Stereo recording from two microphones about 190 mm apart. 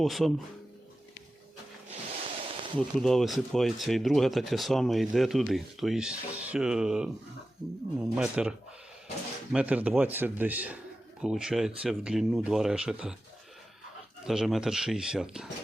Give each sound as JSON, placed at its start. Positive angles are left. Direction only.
{"t": 0.0, "sound": "speech", "side_deg": 0}
{"t": 1.9, "sound": "a sound", "side_deg": -30}
{"t": 2.7, "sound": "speech", "side_deg": 0}
{"t": 8.1, "sound": "a man's voice", "side_deg": -5}
{"t": 14.3, "sound": "speech", "side_deg": 0}